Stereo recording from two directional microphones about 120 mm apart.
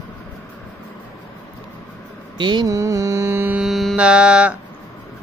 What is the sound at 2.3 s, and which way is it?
Mantra, 40° right (ahead or behind).